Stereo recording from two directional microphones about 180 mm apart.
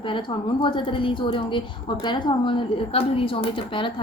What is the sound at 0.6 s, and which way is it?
A woman's voice, 25° left (ahead or behind).